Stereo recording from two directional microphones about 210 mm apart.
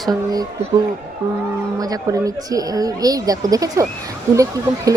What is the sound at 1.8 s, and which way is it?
Speech, 15° right (ahead or behind).